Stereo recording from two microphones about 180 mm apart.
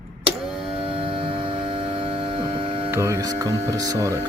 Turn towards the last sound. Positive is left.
turn(degrees=-20)  # may be behind; listen again after turning